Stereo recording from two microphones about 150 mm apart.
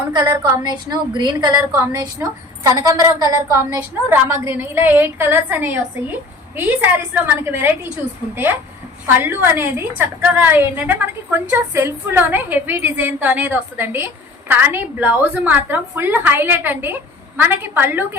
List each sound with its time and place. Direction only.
0.1 s a woman's voice: 20° right (ahead or behind)
9.0 s a woman's voice: 15° right (ahead or behind)